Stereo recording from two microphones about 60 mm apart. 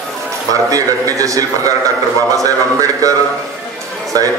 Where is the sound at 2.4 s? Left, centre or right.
Right.